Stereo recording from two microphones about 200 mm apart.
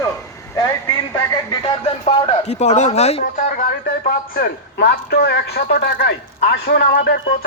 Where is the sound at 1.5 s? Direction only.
25° left (ahead or behind).